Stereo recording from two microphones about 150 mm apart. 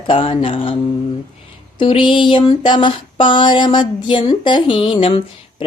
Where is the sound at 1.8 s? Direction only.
35° left (ahead or behind).